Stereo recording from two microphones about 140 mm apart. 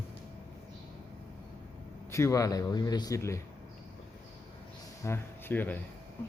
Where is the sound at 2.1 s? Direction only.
20° left (ahead or behind).